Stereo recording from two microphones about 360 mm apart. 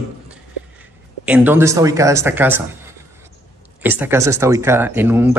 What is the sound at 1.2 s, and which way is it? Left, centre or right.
Speech, centre.